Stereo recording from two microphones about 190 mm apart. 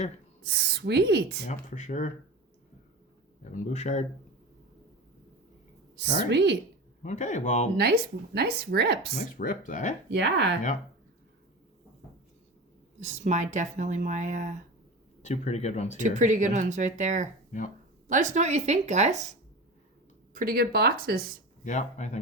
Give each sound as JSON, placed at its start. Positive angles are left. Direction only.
{"t": 0.4, "sound": "speech", "side_deg": -60}
{"t": 1.5, "sound": "speech", "side_deg": 40}
{"t": 3.7, "sound": "speech", "side_deg": 40}
{"t": 6.3, "sound": "speech", "side_deg": -65}
{"t": 7.0, "sound": "speech", "side_deg": 40}
{"t": 7.8, "sound": "speech", "side_deg": -60}
{"t": 9.1, "sound": "speech", "side_deg": 45}
{"t": 10.1, "sound": "speech", "side_deg": -65}
{"t": 13.0, "sound": "speech", "side_deg": -40}
{"t": 15.2, "sound": "speech", "side_deg": 35}
{"t": 16.0, "sound": "speech", "side_deg": -40}
{"t": 20.3, "sound": "speech", "side_deg": -50}
{"t": 21.6, "sound": "speech", "side_deg": 40}